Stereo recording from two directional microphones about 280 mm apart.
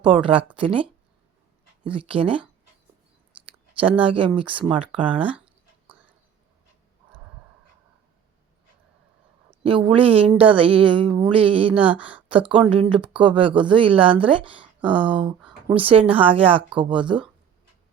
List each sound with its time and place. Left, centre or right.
0.0 s a woman's voice: centre
4.0 s a woman's voice: centre
9.6 s a woman's voice: centre
11.9 s speech: centre
12.3 s a woman's voice: centre